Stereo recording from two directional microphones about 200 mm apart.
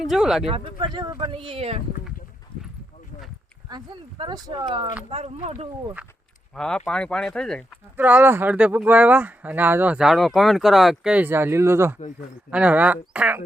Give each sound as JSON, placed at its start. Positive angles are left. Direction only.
{"t": 0.0, "sound": "speech", "side_deg": 0}
{"t": 0.4, "sound": "speech", "side_deg": -25}
{"t": 5.0, "sound": "speech", "side_deg": -30}
{"t": 6.5, "sound": "speech", "side_deg": 5}
{"t": 7.9, "sound": "speech", "side_deg": -10}